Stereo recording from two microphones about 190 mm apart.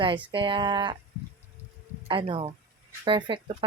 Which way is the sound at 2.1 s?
25° right (ahead or behind).